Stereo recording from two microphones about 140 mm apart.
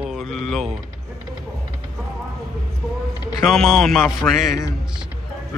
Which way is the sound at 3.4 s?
Centre (ahead or behind).